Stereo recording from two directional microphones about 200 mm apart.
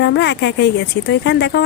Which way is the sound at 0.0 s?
60° left (ahead or behind).